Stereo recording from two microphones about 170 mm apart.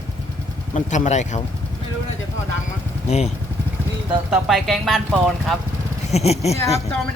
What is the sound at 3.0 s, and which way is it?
Speech, 40° left (ahead or behind).